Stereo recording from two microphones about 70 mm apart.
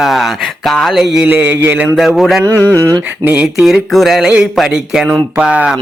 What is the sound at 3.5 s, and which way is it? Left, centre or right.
Music, centre.